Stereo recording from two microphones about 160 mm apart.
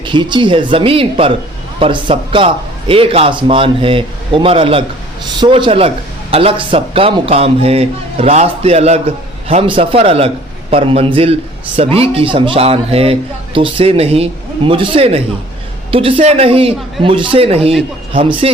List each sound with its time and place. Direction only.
0.0 s a man's voice: 30° right (ahead or behind)